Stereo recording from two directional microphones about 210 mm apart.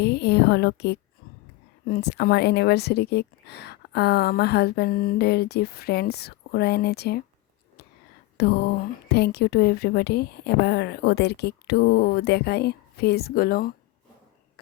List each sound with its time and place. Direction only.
0.0 s a woman's voice: 50° left (ahead or behind)
8.4 s speech: 50° left (ahead or behind)